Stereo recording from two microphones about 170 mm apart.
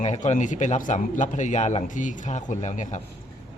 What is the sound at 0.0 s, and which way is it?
A man's voice, 40° left (ahead or behind).